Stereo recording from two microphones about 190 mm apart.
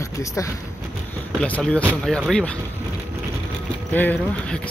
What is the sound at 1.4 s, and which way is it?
Speech, 5° left (ahead or behind).